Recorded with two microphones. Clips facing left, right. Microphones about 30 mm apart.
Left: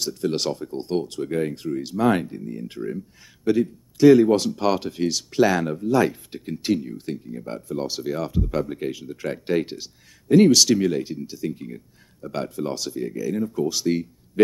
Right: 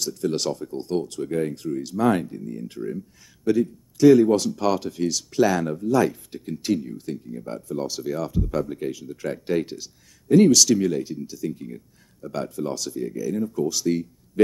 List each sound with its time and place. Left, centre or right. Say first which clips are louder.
0.0 s speech: left 1 dB; left